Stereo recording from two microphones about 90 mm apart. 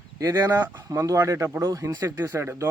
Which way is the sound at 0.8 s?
40° right (ahead or behind).